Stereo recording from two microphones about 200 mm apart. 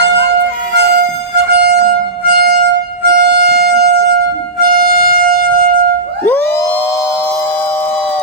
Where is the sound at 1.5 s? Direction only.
55° right (ahead or behind).